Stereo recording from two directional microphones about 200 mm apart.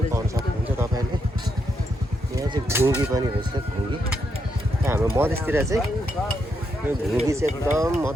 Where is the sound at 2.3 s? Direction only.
15° right (ahead or behind).